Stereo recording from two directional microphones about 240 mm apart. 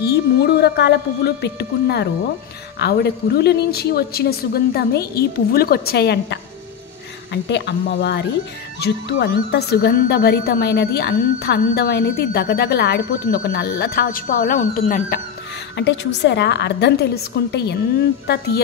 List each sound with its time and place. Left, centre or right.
0.0 s a woman's voice: left
7.4 s a woman's voice: left
15.7 s a woman's voice: left